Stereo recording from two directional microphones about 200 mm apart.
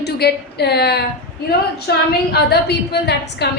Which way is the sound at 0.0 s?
55° left (ahead or behind).